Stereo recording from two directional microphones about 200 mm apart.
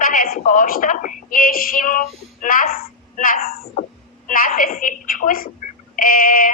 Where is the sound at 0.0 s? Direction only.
45° left (ahead or behind).